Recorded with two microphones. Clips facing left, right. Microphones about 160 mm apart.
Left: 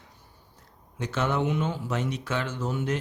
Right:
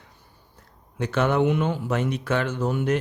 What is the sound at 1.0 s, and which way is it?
Speech, 60° right (ahead or behind).